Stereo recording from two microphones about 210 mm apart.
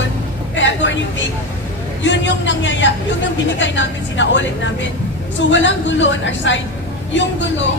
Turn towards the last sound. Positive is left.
turn(degrees=60)  # may be behind; listen again after turning